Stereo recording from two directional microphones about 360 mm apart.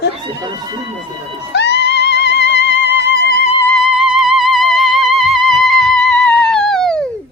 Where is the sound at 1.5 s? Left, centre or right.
Left.